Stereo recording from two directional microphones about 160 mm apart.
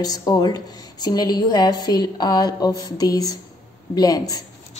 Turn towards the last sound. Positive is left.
turn(degrees=25)  # may be behind; listen again after turning